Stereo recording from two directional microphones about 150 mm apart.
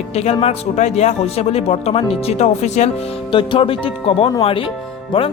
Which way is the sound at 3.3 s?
35° left (ahead or behind).